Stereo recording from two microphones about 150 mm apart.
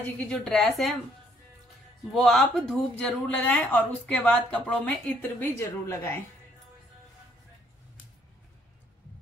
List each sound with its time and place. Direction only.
0.0 s a woman's voice: 5° left (ahead or behind)
2.1 s speech: centre (ahead or behind)
5.6 s a woman's voice: 20° left (ahead or behind)